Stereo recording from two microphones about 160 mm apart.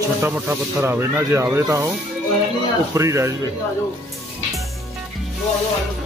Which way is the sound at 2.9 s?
20° right (ahead or behind).